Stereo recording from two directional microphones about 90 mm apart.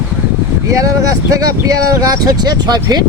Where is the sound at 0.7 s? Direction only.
40° right (ahead or behind).